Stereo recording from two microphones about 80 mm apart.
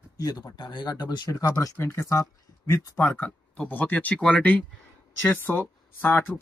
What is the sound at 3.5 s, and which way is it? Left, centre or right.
Speech, centre.